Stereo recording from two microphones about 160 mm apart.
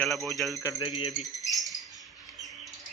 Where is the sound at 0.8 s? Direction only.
35° left (ahead or behind).